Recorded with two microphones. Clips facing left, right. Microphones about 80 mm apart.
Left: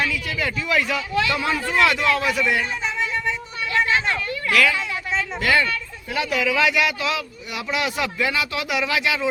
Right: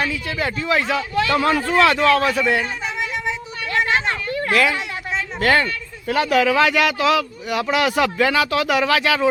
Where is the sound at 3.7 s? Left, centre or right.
Right.